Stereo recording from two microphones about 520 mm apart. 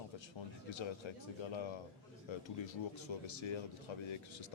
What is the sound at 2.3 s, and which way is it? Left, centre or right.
A man's voice, left.